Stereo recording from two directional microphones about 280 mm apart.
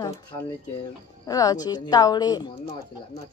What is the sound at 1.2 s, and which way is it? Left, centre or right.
A woman's voice, centre.